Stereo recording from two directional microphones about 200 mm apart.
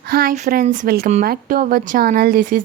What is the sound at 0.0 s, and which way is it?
A woman's voice, 50° right (ahead or behind).